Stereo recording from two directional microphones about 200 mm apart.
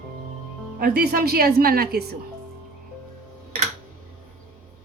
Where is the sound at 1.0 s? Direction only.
50° right (ahead or behind).